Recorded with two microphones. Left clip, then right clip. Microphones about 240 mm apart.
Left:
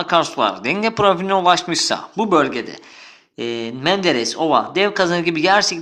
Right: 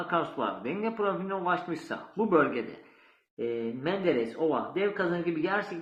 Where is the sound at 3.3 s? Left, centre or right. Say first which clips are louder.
Left 8 dB; left.